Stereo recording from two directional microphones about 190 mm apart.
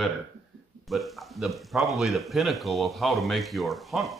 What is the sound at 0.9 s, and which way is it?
Speech, centre (ahead or behind).